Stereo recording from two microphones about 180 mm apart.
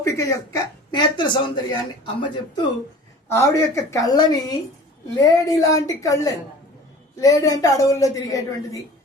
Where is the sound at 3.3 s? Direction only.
15° left (ahead or behind).